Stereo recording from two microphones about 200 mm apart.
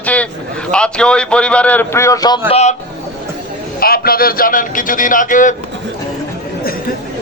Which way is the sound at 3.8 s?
50° left (ahead or behind).